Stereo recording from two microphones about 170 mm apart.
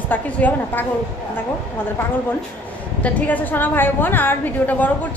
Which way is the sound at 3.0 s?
10° left (ahead or behind).